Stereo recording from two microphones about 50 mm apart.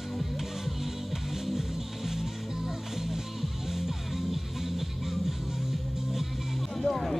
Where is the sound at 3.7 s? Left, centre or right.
Centre.